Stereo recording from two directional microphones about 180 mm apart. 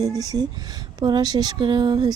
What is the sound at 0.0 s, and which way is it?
Speech, 20° right (ahead or behind).